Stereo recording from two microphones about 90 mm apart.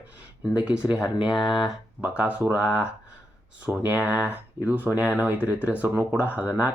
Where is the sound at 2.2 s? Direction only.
15° right (ahead or behind).